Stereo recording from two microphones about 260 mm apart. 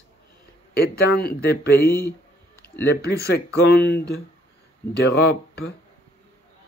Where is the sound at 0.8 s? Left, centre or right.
Left.